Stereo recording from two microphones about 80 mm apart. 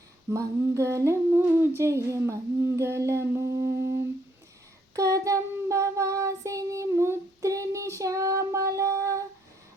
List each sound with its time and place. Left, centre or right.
0.3 s humming: right
4.9 s child singing: right